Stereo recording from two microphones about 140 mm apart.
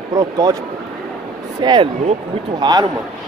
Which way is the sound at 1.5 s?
30° right (ahead or behind).